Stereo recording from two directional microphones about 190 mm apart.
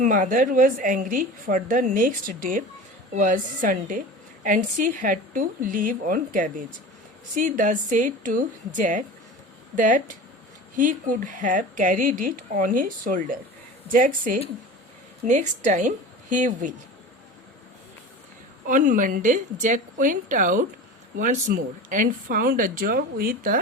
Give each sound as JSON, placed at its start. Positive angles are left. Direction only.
{"t": 0.0, "sound": "a woman's voice", "side_deg": -45}
{"t": 18.6, "sound": "a woman's voice", "side_deg": -45}